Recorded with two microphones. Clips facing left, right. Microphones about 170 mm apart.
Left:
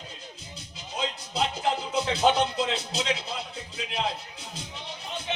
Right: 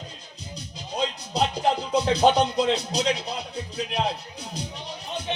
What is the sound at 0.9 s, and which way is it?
Music, 40° right (ahead or behind).